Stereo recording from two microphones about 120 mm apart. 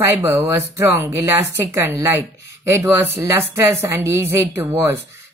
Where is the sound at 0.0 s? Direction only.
25° right (ahead or behind).